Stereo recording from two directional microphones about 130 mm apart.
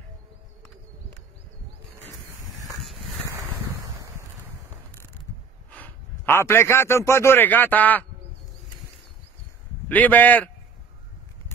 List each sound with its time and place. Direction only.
3.3 s wind: 25° right (ahead or behind)
5.7 s a man's voice: 15° left (ahead or behind)
9.8 s a man's voice: 15° left (ahead or behind)